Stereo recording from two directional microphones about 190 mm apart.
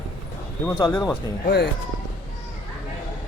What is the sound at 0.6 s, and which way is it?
Speech, 10° left (ahead or behind).